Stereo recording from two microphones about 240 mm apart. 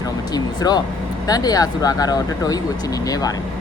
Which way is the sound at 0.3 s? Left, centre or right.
Centre.